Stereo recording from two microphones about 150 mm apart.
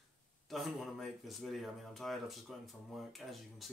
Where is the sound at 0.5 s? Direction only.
Centre (ahead or behind).